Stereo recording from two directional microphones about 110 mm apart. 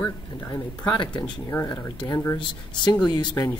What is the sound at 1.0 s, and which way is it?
Speech, 45° left (ahead or behind).